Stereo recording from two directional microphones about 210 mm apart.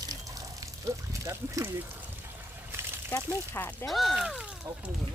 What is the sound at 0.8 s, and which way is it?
Speech, 15° right (ahead or behind).